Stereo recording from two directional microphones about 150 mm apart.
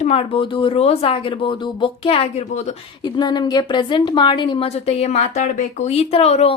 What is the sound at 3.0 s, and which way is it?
A woman's voice, 30° left (ahead or behind).